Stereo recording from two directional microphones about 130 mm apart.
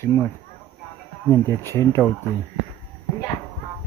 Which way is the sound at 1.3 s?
20° left (ahead or behind).